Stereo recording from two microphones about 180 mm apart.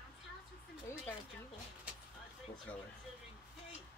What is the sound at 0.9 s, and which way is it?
Speech, 15° left (ahead or behind).